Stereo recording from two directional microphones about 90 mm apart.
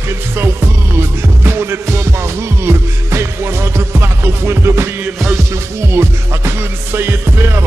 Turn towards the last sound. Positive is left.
turn(degrees=-25)  # may be behind; listen again after turning